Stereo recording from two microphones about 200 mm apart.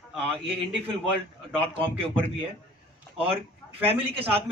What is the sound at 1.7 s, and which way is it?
Speech, 25° right (ahead or behind).